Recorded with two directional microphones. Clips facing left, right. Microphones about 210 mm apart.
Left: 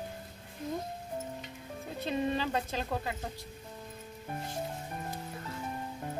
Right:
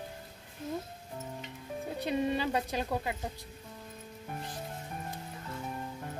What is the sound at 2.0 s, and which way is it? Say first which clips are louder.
Speech: right 1 dB; 15° right (ahead or behind).